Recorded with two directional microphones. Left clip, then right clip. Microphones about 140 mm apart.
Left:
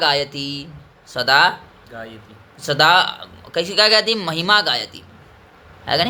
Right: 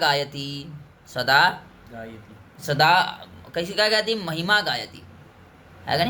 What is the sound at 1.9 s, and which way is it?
A woman's voice, 20° left (ahead or behind).